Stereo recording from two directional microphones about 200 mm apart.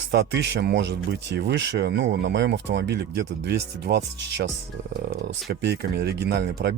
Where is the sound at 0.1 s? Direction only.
60° right (ahead or behind).